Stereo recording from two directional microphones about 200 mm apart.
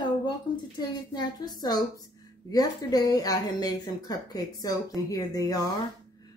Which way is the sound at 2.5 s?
20° left (ahead or behind).